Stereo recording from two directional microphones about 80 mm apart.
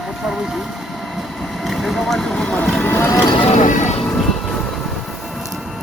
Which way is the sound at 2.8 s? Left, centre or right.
Left.